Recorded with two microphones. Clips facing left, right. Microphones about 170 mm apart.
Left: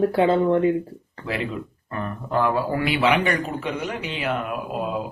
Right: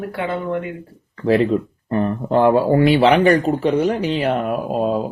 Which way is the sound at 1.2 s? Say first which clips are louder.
Right 12 dB; 35° right (ahead or behind).